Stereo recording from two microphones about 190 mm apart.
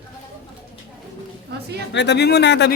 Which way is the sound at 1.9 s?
65° left (ahead or behind).